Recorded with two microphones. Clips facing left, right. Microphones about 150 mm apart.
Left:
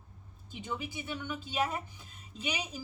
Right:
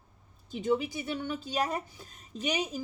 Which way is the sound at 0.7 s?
35° right (ahead or behind).